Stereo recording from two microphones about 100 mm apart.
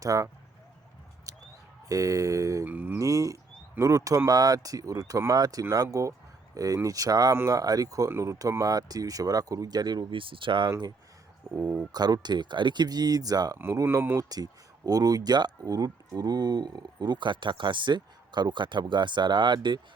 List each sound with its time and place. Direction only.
0.0 s speech: 35° right (ahead or behind)
1.3 s a sound: 35° right (ahead or behind)
1.9 s speech: 35° right (ahead or behind)
2.6 s mantra: 20° right (ahead or behind)
3.0 s speech: 35° right (ahead or behind); by 10.7 s 55° right (ahead or behind)
11.9 s speech: 40° right (ahead or behind)
13.8 s speech: 20° right (ahead or behind)
14.2 s speech: 40° right (ahead or behind)